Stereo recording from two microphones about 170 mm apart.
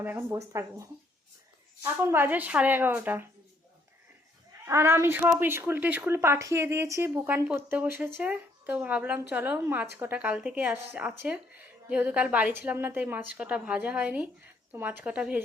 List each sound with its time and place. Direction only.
0.0 s a woman's voice: 15° right (ahead or behind)
4.6 s a woman's voice: 15° right (ahead or behind)